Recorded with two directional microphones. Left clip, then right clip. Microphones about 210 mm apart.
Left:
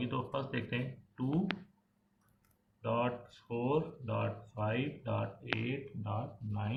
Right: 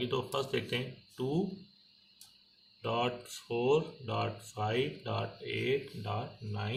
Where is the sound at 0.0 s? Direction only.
40° right (ahead or behind).